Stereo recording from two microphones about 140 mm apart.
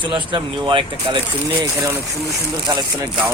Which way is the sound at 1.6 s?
20° right (ahead or behind).